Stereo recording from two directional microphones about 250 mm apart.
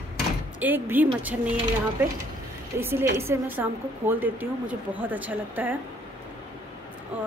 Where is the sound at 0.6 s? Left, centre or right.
Centre.